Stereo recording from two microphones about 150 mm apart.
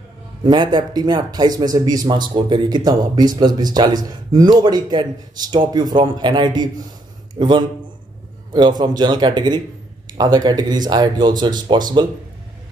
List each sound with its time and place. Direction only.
0.4 s a man's voice: 30° right (ahead or behind)